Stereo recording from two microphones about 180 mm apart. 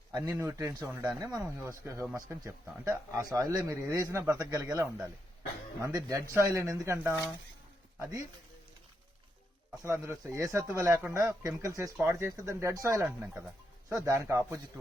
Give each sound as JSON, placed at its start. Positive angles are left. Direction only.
{"t": 0.1, "sound": "speech", "side_deg": -10}
{"t": 9.8, "sound": "speech", "side_deg": -15}